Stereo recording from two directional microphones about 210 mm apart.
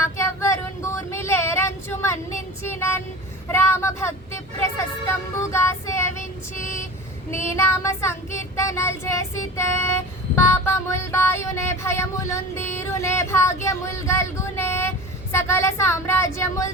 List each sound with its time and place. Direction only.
0.0 s child singing: 15° left (ahead or behind)
3.5 s vehicle: 10° left (ahead or behind)
4.8 s child singing: 15° left (ahead or behind)
13.7 s speech: 15° left (ahead or behind)